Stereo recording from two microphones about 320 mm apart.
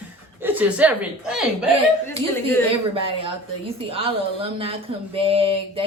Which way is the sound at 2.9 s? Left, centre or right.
Centre.